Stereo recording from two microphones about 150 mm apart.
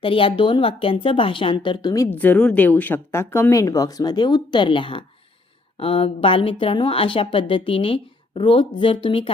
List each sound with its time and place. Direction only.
0.0 s speech: 35° left (ahead or behind)
2.1 s speech: 10° left (ahead or behind); by 9.3 s 35° left (ahead or behind)